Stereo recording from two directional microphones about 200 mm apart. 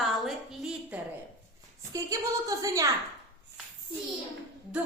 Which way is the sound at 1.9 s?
15° right (ahead or behind).